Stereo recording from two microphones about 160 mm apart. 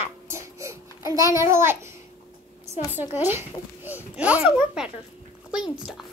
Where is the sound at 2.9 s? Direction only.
15° right (ahead or behind).